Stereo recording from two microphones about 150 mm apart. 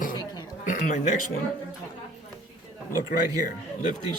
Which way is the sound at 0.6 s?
60° left (ahead or behind).